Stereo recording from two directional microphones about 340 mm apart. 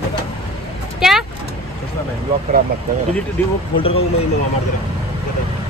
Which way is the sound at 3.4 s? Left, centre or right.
Centre.